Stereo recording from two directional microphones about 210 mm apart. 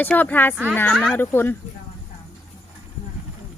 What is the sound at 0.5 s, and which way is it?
Speech, 5° right (ahead or behind).